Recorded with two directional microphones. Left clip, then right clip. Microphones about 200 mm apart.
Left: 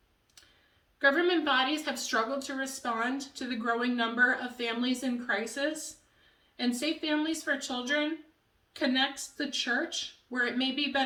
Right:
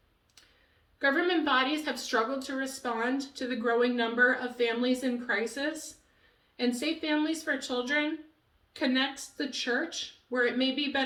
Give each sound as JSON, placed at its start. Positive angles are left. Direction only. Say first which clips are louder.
{"t": 0.9, "sound": "speech", "louder": "left 1 dB", "side_deg": 15}
{"t": 6.6, "sound": "speech", "louder": "right 1 dB", "side_deg": 15}